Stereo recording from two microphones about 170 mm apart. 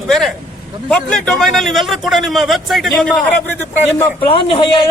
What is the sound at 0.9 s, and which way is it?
A man's voice, 5° left (ahead or behind).